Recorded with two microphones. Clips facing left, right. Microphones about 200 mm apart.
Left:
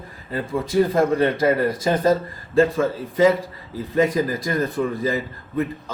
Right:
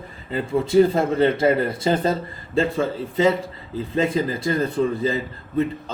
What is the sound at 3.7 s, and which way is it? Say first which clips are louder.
A man's voice: left 2 dB; 25° right (ahead or behind).